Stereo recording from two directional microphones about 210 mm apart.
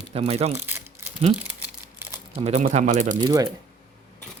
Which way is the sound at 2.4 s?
35° right (ahead or behind).